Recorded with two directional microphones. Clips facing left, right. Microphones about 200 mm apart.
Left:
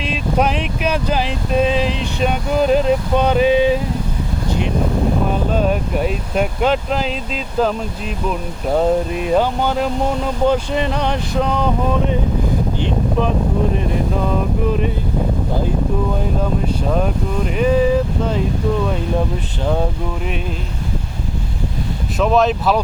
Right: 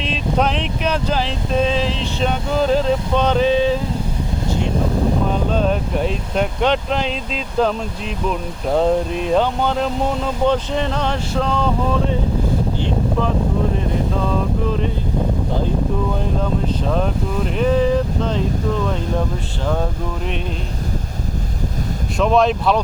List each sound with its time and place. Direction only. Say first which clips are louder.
0.0 s speech: left 1 dB; 10° left (ahead or behind)
5.5 s speech: left 1 dB; 10° left (ahead or behind)
16.4 s speech: left 1 dB; 10° left (ahead or behind)
22.2 s speech: even; centre (ahead or behind)